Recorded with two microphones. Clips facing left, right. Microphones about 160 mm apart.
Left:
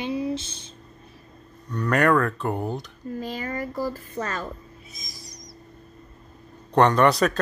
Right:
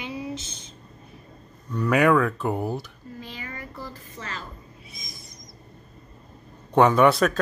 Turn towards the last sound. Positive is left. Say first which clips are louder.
# right 1 dB
turn(degrees=0)  # may be behind; listen again after turning